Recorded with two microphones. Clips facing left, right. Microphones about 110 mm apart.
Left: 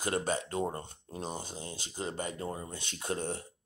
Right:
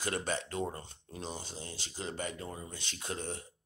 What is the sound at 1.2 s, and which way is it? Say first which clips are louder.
Speech: left 3 dB; 45° left (ahead or behind).